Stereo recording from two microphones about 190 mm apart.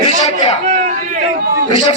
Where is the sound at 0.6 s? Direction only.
40° right (ahead or behind).